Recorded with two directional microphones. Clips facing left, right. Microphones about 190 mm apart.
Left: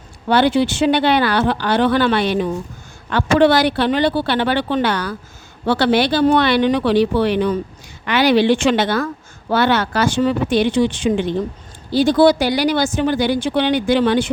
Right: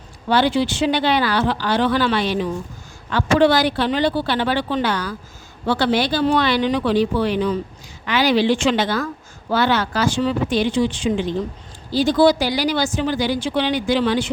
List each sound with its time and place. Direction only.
0.3 s speech: 55° left (ahead or behind)
11.1 s speech: 50° left (ahead or behind)
11.9 s speech: 60° left (ahead or behind)